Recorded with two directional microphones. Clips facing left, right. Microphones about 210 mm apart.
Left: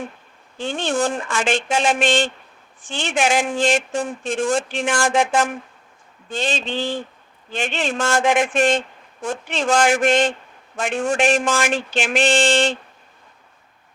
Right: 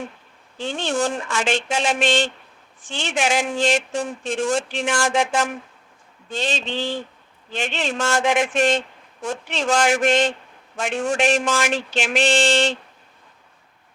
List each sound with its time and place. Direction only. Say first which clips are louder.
0.6 s speech: left 1 dB; 50° left (ahead or behind)